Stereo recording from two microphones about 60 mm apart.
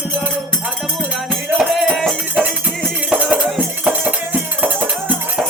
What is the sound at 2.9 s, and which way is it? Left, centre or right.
Music, right.